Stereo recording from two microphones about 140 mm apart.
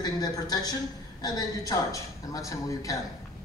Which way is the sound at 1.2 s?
25° left (ahead or behind).